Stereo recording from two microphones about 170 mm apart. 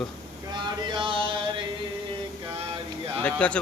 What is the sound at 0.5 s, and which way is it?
Chant, 30° right (ahead or behind).